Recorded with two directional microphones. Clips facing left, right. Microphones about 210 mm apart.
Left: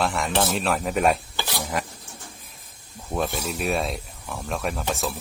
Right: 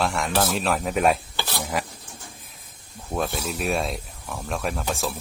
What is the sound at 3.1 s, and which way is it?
Speech, centre (ahead or behind).